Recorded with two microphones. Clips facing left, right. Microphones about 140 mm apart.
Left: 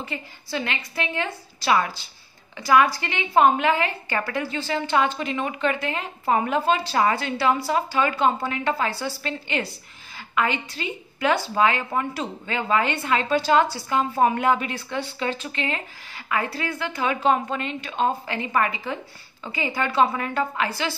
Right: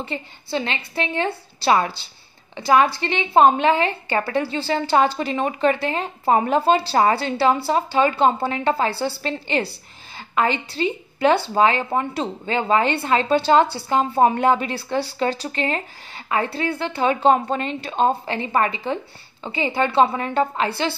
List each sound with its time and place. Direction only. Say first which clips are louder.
0.0 s a woman's voice: right 4 dB; 30° right (ahead or behind)